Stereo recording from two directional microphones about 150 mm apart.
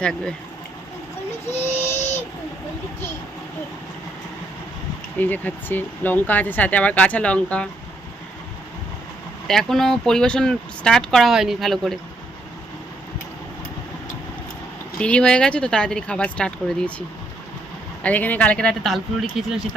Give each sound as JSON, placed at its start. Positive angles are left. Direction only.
{"t": 0.0, "sound": "speech", "side_deg": 5}
{"t": 5.1, "sound": "speech", "side_deg": 10}
{"t": 9.5, "sound": "speech", "side_deg": 0}
{"t": 14.9, "sound": "speech", "side_deg": 5}
{"t": 18.0, "sound": "speech", "side_deg": 10}